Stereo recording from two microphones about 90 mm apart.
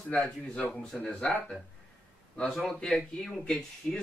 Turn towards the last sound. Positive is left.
turn(degrees=5)  # may be behind; listen again after turning